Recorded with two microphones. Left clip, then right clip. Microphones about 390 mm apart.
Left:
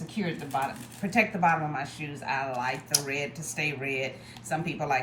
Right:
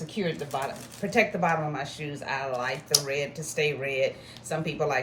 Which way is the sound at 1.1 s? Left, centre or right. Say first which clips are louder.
Even; centre.